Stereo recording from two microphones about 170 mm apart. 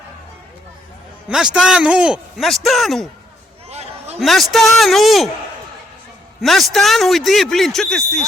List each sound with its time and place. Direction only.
1.5 s speech: 5° right (ahead or behind)
3.7 s a sound: 40° right (ahead or behind)
4.2 s speech: centre (ahead or behind)
6.4 s speech: centre (ahead or behind)